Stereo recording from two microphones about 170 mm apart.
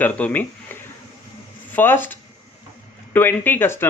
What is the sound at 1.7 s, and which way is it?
Speech, 10° left (ahead or behind).